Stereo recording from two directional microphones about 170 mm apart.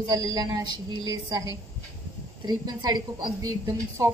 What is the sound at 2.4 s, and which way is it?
A woman's voice, 25° right (ahead or behind).